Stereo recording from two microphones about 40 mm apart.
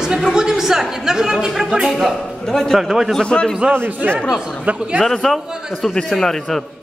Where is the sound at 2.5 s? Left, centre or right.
Centre.